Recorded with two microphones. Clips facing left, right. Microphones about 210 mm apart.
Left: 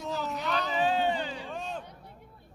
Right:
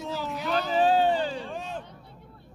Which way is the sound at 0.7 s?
35° right (ahead or behind).